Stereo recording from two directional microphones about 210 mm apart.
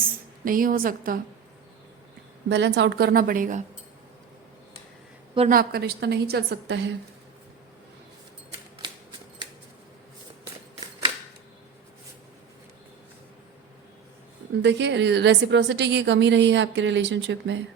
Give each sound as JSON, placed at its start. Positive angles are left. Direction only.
{"t": 0.4, "sound": "a woman's voice", "side_deg": -40}
{"t": 2.5, "sound": "a woman's voice", "side_deg": -55}
{"t": 5.5, "sound": "a woman's voice", "side_deg": -45}
{"t": 14.6, "sound": "a woman's voice", "side_deg": -55}